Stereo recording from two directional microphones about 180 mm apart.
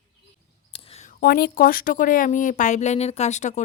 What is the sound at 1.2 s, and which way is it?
Speech, 55° left (ahead or behind).